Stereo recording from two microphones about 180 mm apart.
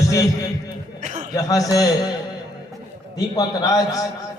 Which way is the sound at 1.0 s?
45° right (ahead or behind).